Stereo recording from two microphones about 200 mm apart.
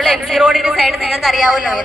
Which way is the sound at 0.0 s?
Centre (ahead or behind).